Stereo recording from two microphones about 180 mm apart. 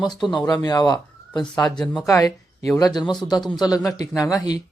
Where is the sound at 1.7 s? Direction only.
5° left (ahead or behind).